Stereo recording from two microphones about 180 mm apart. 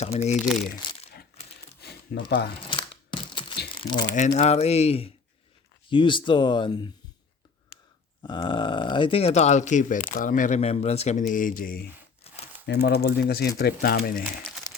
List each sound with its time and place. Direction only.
0.0 s speech: 40° left (ahead or behind)
1.8 s a sound: 65° left (ahead or behind)
2.6 s crushing: 25° left (ahead or behind)
3.8 s speech: 25° left (ahead or behind)
4.1 s speech: 40° left (ahead or behind)
8.2 s speech: 25° left (ahead or behind); by 11.9 s 50° left (ahead or behind)
12.3 s crumpling: 35° left (ahead or behind)
12.6 s speech: 65° left (ahead or behind)